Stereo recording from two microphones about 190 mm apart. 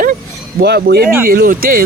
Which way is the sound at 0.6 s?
60° right (ahead or behind).